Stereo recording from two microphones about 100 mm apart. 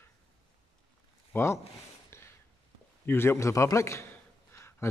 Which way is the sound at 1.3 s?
25° left (ahead or behind).